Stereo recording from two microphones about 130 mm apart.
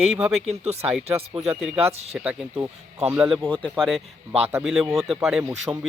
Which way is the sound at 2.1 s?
10° right (ahead or behind).